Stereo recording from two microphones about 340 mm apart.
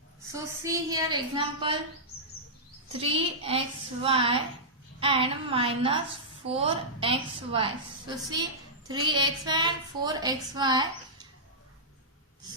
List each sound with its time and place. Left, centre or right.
0.3 s a woman's voice: centre
2.9 s a woman's voice: centre